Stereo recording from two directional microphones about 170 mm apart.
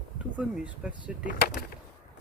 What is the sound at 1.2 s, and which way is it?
Speech, 60° left (ahead or behind).